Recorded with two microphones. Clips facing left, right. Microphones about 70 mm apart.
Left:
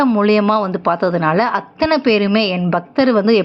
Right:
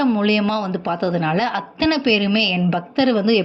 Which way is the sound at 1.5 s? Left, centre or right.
Left.